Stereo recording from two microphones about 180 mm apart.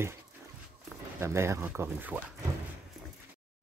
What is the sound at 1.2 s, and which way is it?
Speech, 15° right (ahead or behind).